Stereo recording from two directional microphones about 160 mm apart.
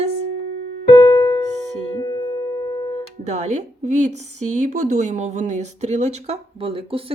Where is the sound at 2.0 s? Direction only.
25° left (ahead or behind).